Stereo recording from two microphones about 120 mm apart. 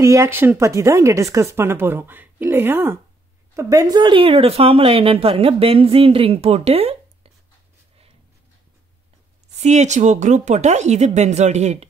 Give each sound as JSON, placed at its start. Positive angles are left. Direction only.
{"t": 0.0, "sound": "speech", "side_deg": -25}
{"t": 3.5, "sound": "speech", "side_deg": -30}
{"t": 9.6, "sound": "speech", "side_deg": -75}